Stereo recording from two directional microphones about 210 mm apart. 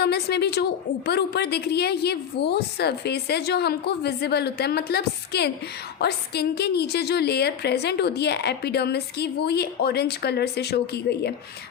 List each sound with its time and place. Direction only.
0.0 s a woman's voice: 50° left (ahead or behind)